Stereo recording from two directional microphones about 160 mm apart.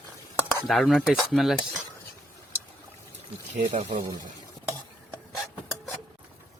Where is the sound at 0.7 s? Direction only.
Centre (ahead or behind).